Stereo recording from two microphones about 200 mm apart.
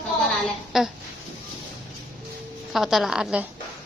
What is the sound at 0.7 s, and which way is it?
Speech, centre (ahead or behind).